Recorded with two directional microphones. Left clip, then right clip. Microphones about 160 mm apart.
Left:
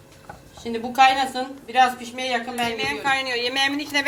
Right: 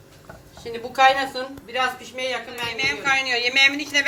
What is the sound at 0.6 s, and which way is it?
A woman's voice, 55° left (ahead or behind).